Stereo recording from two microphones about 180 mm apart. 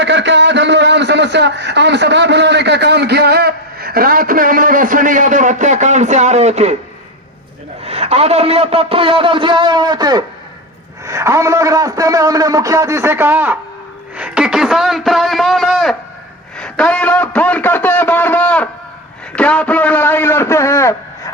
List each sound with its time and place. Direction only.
0.0 s a man's voice: 80° right; by 6.7 s 40° right (ahead or behind)
7.9 s a man's voice: 35° right (ahead or behind); by 16.0 s centre (ahead or behind)
16.6 s a sound: 5° left (ahead or behind)
19.4 s a man's voice: 5° left (ahead or behind)